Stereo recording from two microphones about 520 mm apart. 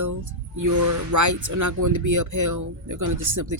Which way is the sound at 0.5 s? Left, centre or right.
Right.